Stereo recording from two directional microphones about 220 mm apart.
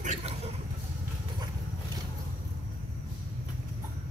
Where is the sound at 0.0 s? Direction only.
30° right (ahead or behind).